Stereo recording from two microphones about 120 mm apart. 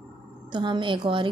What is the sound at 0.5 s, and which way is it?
Speech, 40° right (ahead or behind).